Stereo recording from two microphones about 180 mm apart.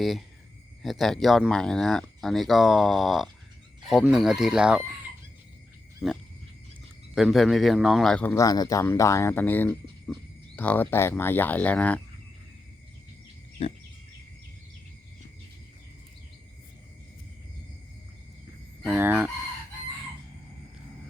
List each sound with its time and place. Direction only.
0.0 s speech: centre (ahead or behind)
6.0 s a man's voice: centre (ahead or behind)
13.6 s a sound: 35° left (ahead or behind)
18.9 s fowl: 10° right (ahead or behind)